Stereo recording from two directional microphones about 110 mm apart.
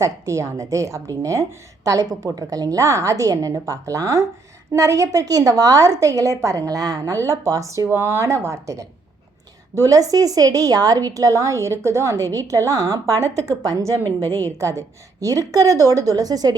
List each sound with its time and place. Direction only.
0.0 s a woman's voice: 25° right (ahead or behind)
14.0 s a woman's voice: 20° left (ahead or behind)
14.6 s a woman's voice: 30° right (ahead or behind)